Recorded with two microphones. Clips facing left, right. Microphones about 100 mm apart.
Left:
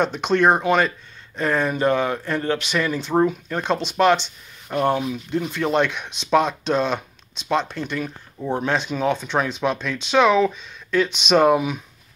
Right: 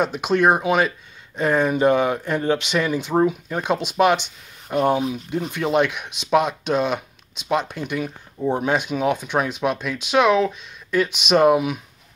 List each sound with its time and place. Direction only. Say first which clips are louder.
0.0 s speech: even; 10° right (ahead or behind)